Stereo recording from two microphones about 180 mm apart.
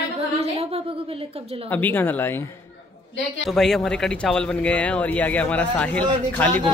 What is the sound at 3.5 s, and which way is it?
Speech, centre (ahead or behind).